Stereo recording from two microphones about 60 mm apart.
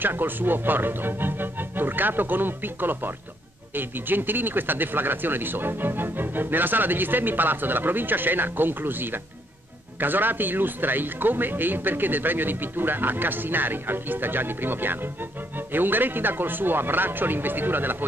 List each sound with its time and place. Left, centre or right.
0.0 s speech: right